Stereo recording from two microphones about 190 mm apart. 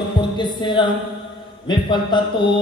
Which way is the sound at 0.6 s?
25° left (ahead or behind).